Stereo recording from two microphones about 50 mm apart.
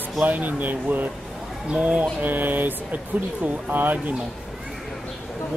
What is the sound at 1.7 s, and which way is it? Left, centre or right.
Speech, right.